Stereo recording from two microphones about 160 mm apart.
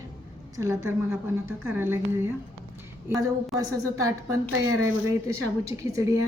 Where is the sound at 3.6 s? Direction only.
20° right (ahead or behind).